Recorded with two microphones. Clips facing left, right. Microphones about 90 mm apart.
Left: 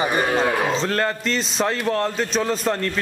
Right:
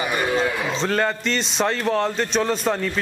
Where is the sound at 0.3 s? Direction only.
55° left (ahead or behind).